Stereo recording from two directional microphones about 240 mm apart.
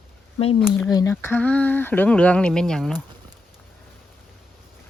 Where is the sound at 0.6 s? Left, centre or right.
Centre.